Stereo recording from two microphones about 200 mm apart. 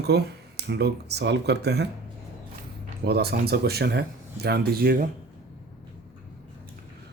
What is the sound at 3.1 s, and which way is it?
Speech, 55° right (ahead or behind).